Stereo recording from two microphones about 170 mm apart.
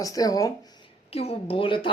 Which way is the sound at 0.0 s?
20° left (ahead or behind).